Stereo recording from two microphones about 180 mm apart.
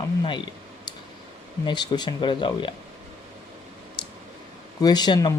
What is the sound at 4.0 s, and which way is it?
Clicking, 25° left (ahead or behind).